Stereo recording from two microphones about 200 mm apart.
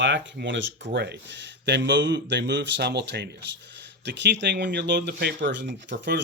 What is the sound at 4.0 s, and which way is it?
Speech, 60° right (ahead or behind).